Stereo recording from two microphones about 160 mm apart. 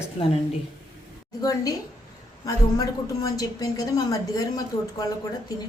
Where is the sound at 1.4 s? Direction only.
20° left (ahead or behind).